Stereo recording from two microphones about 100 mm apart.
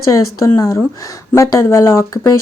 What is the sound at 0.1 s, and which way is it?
Speech, 35° left (ahead or behind).